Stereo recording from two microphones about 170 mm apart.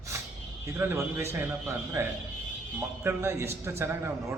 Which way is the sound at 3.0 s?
15° right (ahead or behind).